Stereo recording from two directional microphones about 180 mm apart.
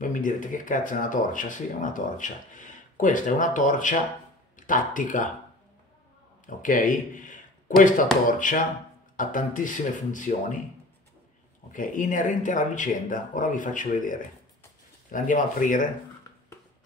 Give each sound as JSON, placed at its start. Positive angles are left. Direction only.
{"t": 0.0, "sound": "speech", "side_deg": 45}
{"t": 6.4, "sound": "speech", "side_deg": 45}
{"t": 11.7, "sound": "speech", "side_deg": 45}